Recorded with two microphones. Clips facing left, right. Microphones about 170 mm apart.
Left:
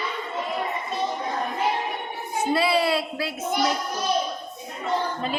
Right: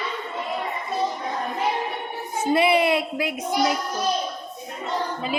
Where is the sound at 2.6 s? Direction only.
20° right (ahead or behind).